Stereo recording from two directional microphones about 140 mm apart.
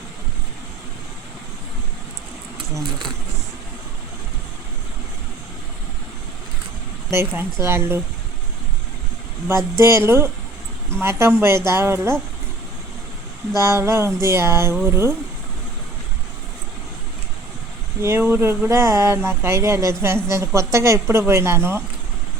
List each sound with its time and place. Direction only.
7.1 s speech: 20° right (ahead or behind)
9.5 s speech: 20° right (ahead or behind)
13.6 s speech: 20° right (ahead or behind)
18.0 s speech: 15° right (ahead or behind)